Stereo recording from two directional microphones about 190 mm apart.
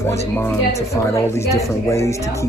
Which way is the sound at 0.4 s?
15° left (ahead or behind).